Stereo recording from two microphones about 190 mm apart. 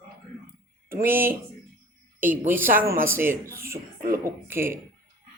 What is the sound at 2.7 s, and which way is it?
Speech, 10° right (ahead or behind).